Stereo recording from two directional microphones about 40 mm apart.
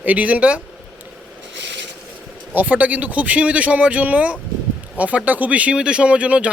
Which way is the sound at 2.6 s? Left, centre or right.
Right.